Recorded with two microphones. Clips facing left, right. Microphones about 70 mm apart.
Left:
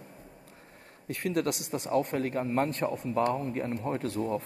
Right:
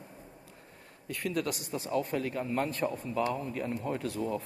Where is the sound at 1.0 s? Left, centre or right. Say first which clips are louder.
Left 3 dB; left.